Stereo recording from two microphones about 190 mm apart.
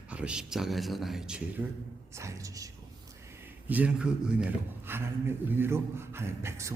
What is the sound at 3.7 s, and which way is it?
A man's voice, 10° right (ahead or behind).